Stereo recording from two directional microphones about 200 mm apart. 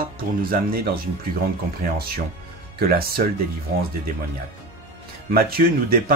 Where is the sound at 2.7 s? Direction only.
50° right (ahead or behind).